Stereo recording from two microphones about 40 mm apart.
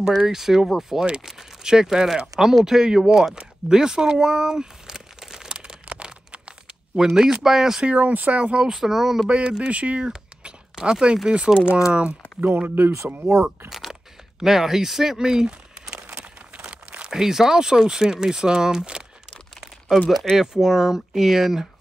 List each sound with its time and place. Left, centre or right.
0.2 s speech: centre
5.5 s a sound: right
7.0 s speech: centre
7.8 s speech: right
8.7 s speech: centre
9.3 s speech: right
12.4 s speech: right
12.7 s speech: right
13.7 s a sound: centre
14.4 s speech: centre
16.5 s crumpling: right
17.1 s speech: centre
20.3 s speech: centre